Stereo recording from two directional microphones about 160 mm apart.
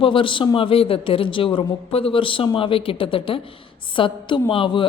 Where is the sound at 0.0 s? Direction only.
30° left (ahead or behind).